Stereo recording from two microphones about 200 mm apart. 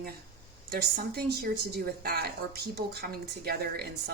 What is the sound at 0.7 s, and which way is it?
A woman's voice, 50° right (ahead or behind).